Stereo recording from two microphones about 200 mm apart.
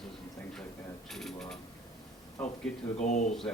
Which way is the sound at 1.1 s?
Centre (ahead or behind).